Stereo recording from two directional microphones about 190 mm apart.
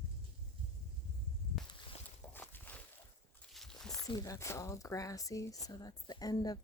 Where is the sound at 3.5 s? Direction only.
Centre (ahead or behind).